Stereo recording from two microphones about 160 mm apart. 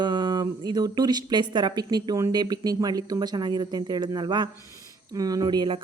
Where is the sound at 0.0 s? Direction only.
25° right (ahead or behind).